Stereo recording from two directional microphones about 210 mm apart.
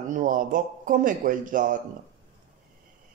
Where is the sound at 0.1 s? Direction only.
40° right (ahead or behind).